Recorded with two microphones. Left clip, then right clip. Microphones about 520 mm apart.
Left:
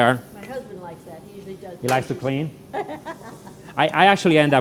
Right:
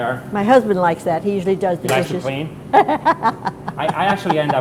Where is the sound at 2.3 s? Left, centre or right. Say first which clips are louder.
Right 2 dB; left.